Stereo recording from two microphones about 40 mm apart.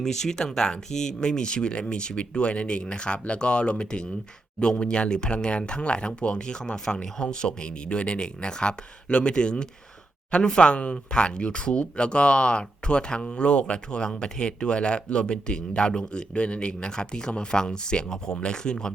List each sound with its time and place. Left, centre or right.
0.0 s speech: centre